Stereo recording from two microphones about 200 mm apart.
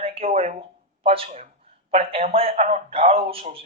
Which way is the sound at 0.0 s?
30° right (ahead or behind).